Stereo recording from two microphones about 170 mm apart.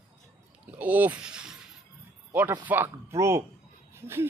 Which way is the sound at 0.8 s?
10° right (ahead or behind).